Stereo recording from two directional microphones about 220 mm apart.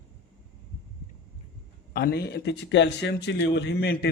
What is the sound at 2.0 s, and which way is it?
Speech, 45° left (ahead or behind).